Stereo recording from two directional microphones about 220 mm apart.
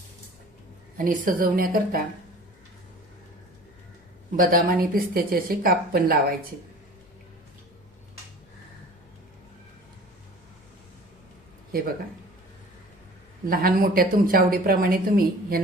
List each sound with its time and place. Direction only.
0.9 s speech: 40° right (ahead or behind)
4.4 s speech: 40° right (ahead or behind)
13.5 s speech: 40° right (ahead or behind)